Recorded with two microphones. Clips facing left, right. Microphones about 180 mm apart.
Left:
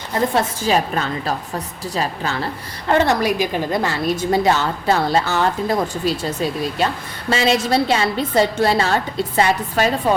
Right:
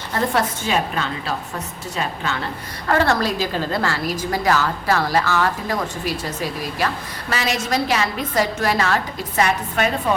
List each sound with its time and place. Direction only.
0.6 s a woman's voice: 40° left (ahead or behind)
2.8 s a woman's voice: 20° left (ahead or behind)